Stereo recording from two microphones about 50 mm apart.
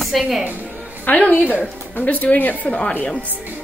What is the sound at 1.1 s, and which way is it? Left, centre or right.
Speech, left.